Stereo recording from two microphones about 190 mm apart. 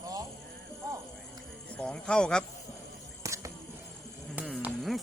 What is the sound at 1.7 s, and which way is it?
Speech, 5° left (ahead or behind).